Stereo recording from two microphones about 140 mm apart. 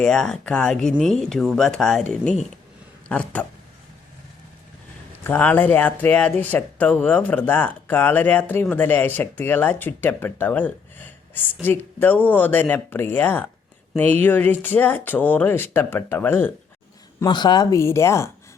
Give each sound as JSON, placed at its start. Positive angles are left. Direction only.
{"t": 0.0, "sound": "speech", "side_deg": 5}
{"t": 5.2, "sound": "speech", "side_deg": 10}
{"t": 17.2, "sound": "speech", "side_deg": 30}